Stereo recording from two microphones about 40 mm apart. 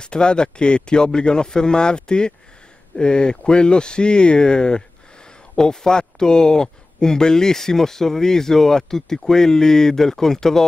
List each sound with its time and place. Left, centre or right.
0.0 s speech: left